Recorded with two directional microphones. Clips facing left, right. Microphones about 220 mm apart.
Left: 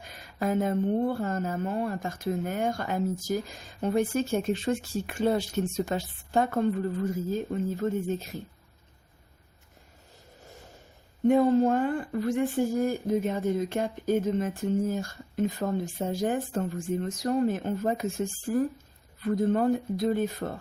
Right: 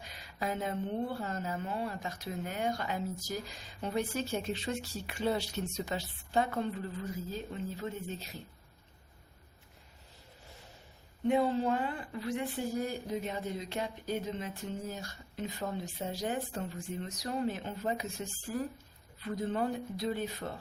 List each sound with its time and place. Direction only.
0.0 s speech: 50° left (ahead or behind)
11.3 s speech: 45° left (ahead or behind)